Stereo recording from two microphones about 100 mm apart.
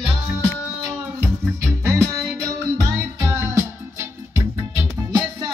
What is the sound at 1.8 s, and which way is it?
Music, 30° right (ahead or behind).